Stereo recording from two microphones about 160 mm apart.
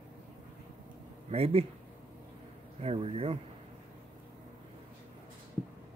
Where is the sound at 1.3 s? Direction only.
40° right (ahead or behind).